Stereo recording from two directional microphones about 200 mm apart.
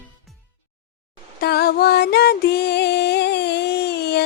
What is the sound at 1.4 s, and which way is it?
Music, 55° left (ahead or behind).